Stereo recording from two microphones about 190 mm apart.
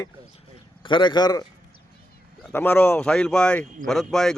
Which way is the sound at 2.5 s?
10° left (ahead or behind).